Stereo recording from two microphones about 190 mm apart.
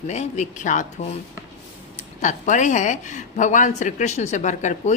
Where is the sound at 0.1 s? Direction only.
35° left (ahead or behind).